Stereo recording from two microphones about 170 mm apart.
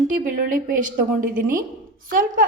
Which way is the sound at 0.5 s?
55° right (ahead or behind).